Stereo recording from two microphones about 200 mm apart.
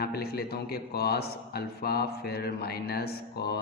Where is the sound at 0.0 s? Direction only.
50° left (ahead or behind).